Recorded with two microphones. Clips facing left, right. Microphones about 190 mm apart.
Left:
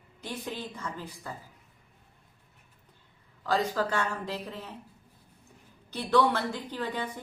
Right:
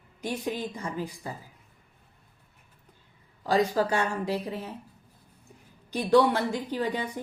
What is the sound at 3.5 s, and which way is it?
A woman's voice, 15° right (ahead or behind).